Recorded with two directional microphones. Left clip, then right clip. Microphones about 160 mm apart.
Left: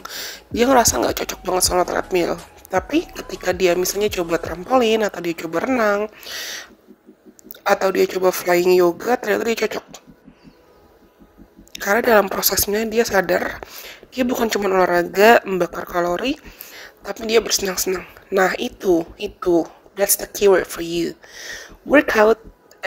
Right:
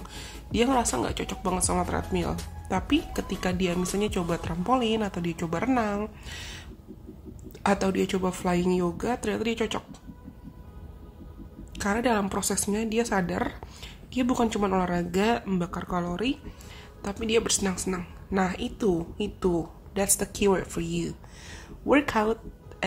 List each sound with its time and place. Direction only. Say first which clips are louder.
0.0 s speech: left 11 dB; 35° left (ahead or behind)
3.4 s speech: left 13 dB; 35° left (ahead or behind)
11.7 s speech: left 11 dB; 35° left (ahead or behind)
15.4 s a woman's voice: left 11 dB; 25° left (ahead or behind)